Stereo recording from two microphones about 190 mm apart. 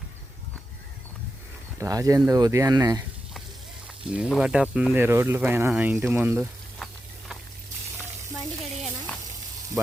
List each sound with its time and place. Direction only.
1.8 s speech: 15° right (ahead or behind)
4.1 s speech: 5° right (ahead or behind)